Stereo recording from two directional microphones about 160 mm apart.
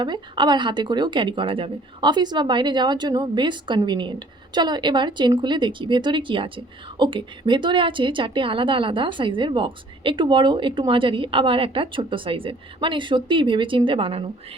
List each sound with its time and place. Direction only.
0.0 s a woman's voice: 30° right (ahead or behind)